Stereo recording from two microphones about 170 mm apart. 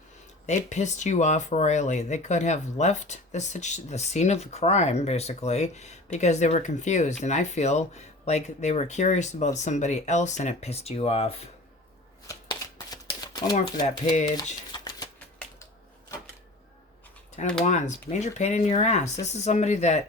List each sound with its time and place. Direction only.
0.4 s speech: 45° left (ahead or behind)
12.3 s shuffling cards: 20° left (ahead or behind)
13.8 s speech: 45° left (ahead or behind)
14.3 s a sound: 25° left (ahead or behind)
17.6 s speech: 45° left (ahead or behind)